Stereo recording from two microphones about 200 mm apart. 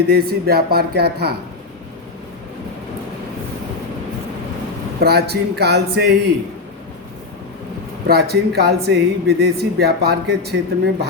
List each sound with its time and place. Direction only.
0.1 s speech: 50° right (ahead or behind)
4.9 s a man's voice: 55° right (ahead or behind)
8.0 s speech: 55° right (ahead or behind)